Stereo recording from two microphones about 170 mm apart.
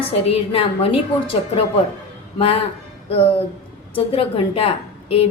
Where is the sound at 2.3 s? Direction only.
35° left (ahead or behind).